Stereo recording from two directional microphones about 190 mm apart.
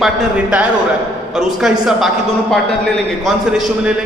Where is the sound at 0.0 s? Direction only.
5° right (ahead or behind).